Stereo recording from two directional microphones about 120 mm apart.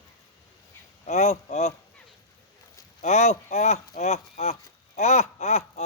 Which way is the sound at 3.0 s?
70° left (ahead or behind).